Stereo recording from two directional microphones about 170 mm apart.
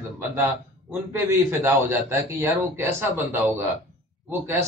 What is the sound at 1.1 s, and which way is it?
A man's voice, 15° right (ahead or behind).